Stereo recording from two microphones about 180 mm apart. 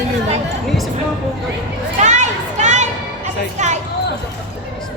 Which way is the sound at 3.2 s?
40° right (ahead or behind).